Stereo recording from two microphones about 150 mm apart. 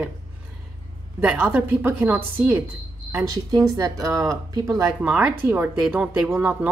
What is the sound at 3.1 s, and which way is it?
A woman's voice, 25° right (ahead or behind).